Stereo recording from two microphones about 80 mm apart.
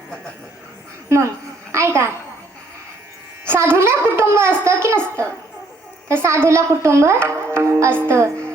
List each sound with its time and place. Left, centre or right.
1.7 s a woman's voice: right
3.5 s a woman's voice: right
7.3 s music: right